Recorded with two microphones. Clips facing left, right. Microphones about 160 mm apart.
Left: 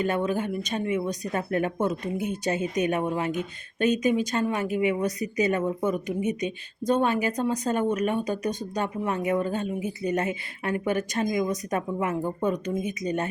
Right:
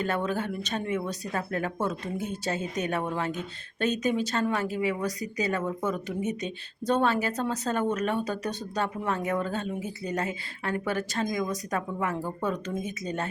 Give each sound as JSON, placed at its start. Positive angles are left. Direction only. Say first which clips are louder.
{"t": 0.0, "sound": "speech", "louder": "left 3 dB", "side_deg": 10}